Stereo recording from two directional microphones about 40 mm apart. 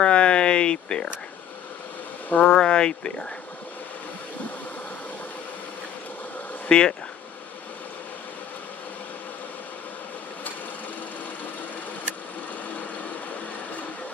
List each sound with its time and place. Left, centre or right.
0.0 s a sound: left
2.2 s speech: left
2.5 s speech: left
6.7 s speech: left